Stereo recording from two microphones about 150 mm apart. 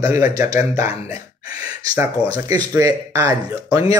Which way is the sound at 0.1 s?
25° right (ahead or behind).